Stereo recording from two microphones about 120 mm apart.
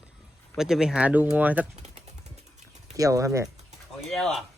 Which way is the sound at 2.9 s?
30° right (ahead or behind).